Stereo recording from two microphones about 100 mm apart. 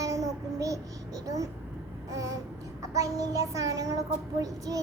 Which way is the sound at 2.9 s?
35° right (ahead or behind).